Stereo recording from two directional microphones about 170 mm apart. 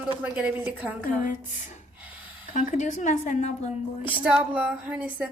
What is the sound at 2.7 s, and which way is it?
A woman's voice, 45° left (ahead or behind).